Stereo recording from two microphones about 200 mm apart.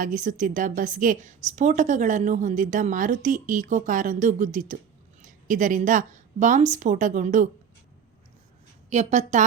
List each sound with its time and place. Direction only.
0.0 s a woman's voice: 40° right (ahead or behind)
8.9 s a woman's voice: 35° right (ahead or behind)